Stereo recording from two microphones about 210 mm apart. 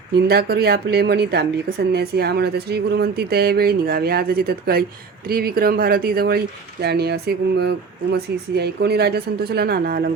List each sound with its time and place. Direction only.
0.3 s speech: 50° right (ahead or behind)